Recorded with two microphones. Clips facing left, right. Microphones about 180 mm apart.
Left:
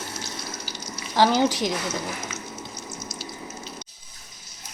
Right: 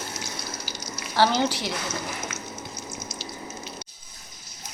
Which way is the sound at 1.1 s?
15° left (ahead or behind).